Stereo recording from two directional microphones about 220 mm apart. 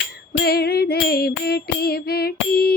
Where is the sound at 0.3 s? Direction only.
45° left (ahead or behind).